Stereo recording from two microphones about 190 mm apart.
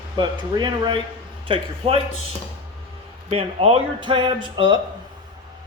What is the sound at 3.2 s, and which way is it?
Speech, 35° right (ahead or behind).